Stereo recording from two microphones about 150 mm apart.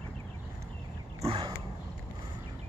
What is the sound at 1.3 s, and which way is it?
Roaring cats, 35° right (ahead or behind).